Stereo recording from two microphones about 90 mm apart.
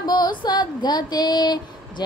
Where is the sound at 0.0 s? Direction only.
55° left (ahead or behind).